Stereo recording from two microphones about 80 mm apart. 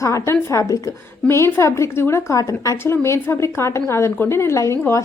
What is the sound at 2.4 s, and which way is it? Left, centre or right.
Speech, left.